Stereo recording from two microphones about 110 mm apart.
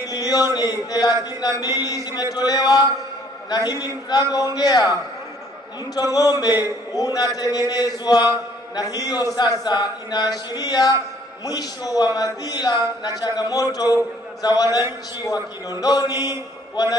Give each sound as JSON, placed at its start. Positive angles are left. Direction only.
{"t": 0.0, "sound": "a sound", "side_deg": 35}
{"t": 1.6, "sound": "a man's voice", "side_deg": 35}
{"t": 6.1, "sound": "a man's voice", "side_deg": 35}